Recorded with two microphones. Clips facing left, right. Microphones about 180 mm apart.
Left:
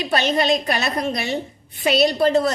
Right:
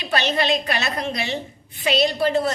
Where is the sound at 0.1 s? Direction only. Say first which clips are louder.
Left 2 dB; 45° left (ahead or behind).